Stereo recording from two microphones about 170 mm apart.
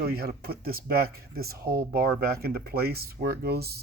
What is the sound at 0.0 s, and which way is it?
Speech, 65° right (ahead or behind).